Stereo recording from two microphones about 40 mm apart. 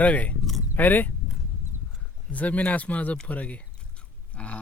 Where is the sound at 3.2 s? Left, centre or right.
Left.